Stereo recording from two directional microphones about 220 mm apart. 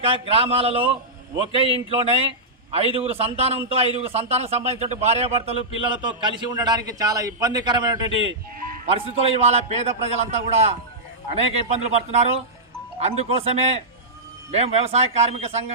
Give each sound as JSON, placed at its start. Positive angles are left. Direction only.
{"t": 0.0, "sound": "a man's voice", "side_deg": -25}
{"t": 8.5, "sound": "music", "side_deg": -40}
{"t": 8.9, "sound": "a man's voice", "side_deg": -25}